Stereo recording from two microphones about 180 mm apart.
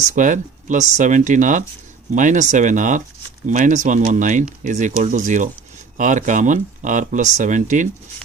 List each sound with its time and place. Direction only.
0.0 s speech: 45° right (ahead or behind)